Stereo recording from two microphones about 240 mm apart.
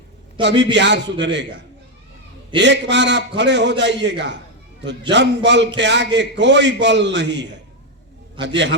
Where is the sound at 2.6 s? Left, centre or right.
Right.